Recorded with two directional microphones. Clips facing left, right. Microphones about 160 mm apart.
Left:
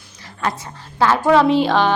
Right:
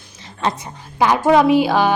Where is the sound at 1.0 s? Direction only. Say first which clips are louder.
Right 1 dB; 15° right (ahead or behind).